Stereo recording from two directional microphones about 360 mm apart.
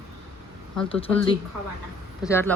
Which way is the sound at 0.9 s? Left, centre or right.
Centre.